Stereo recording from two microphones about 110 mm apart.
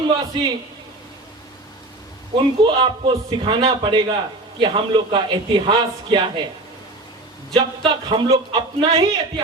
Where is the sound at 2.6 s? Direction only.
50° right (ahead or behind).